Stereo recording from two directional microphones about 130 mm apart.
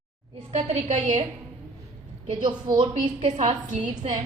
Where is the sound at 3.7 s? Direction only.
70° right (ahead or behind).